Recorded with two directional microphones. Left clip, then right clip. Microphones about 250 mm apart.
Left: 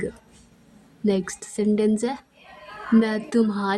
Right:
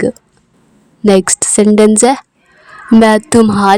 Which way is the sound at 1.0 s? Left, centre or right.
Right.